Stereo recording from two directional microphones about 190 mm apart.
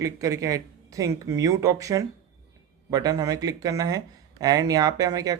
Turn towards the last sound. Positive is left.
turn(degrees=-20)  # may be behind; listen again after turning